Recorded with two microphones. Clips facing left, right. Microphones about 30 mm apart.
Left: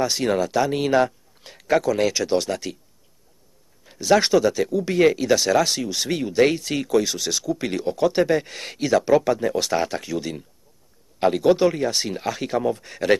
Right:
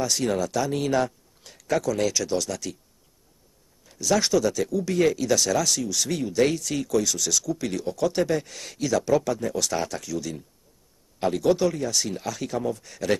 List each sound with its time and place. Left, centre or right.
0.0 s speech: left
3.8 s speech: left